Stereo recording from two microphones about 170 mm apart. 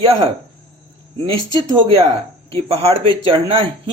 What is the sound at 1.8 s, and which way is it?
Speech, 35° right (ahead or behind).